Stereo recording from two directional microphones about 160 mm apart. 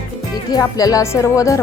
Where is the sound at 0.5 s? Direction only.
20° left (ahead or behind).